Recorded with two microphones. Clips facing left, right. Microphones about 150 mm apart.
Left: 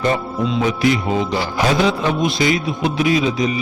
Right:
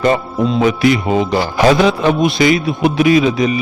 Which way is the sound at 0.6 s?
70° right (ahead or behind).